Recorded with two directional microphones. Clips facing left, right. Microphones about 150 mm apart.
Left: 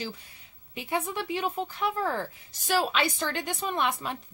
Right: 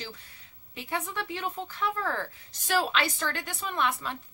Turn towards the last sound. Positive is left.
turn(degrees=20)  # may be behind; listen again after turning